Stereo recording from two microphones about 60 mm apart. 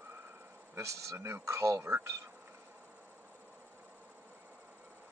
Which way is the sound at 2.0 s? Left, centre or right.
Right.